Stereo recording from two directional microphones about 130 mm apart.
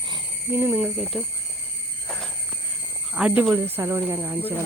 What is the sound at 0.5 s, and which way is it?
Speech, 15° right (ahead or behind).